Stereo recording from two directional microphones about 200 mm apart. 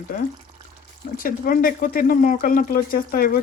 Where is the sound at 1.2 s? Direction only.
45° left (ahead or behind).